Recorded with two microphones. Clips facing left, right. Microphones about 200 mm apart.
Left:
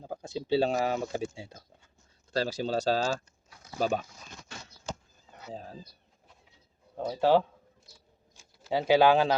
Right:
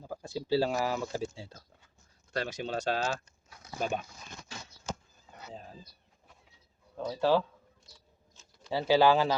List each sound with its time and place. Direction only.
0.0 s speech: 20° left (ahead or behind)
2.3 s speech: 30° left (ahead or behind)
5.5 s speech: 35° left (ahead or behind)
6.9 s speech: 20° left (ahead or behind)
7.9 s a sound: 5° left (ahead or behind)
8.7 s speech: 15° left (ahead or behind)